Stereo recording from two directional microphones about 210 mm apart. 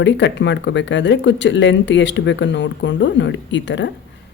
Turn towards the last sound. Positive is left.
turn(degrees=60)  # may be behind; listen again after turning